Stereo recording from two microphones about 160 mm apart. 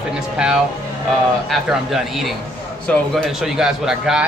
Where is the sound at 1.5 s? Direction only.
Centre (ahead or behind).